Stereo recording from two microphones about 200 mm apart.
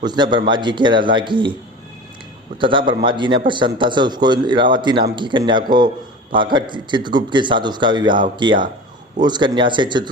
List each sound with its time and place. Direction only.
0.0 s speech: 20° right (ahead or behind)
2.6 s speech: 25° right (ahead or behind)